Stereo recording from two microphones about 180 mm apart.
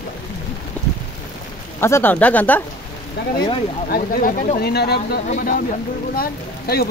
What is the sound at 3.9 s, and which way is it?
Speech, 50° left (ahead or behind).